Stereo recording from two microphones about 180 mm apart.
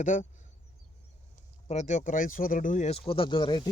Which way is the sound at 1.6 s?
40° left (ahead or behind).